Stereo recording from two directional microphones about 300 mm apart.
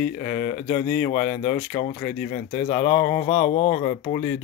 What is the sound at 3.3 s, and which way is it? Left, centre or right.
Speech, left.